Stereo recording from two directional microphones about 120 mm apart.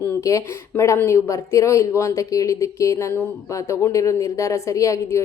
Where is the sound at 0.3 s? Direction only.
25° left (ahead or behind).